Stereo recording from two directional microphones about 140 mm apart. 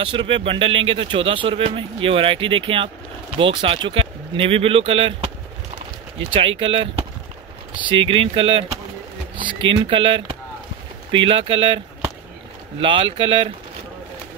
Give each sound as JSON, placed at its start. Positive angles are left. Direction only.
{"t": 0.0, "sound": "speech", "side_deg": -35}
{"t": 6.3, "sound": "speech", "side_deg": -40}
{"t": 12.8, "sound": "speech", "side_deg": -40}